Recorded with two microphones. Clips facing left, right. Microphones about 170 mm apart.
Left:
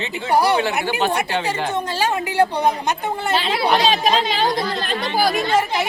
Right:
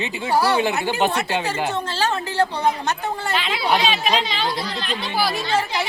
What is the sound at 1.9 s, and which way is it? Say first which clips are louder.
A woman's voice: left 4 dB; 15° left (ahead or behind).